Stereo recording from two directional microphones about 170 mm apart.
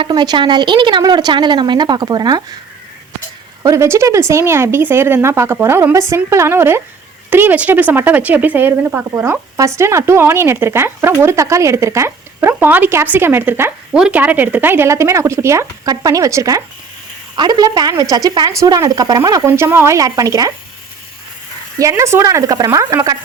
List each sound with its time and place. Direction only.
0.0 s a woman's voice: 25° right (ahead or behind)
3.6 s a woman's voice: 15° right (ahead or behind)
21.8 s a woman's voice: 20° right (ahead or behind)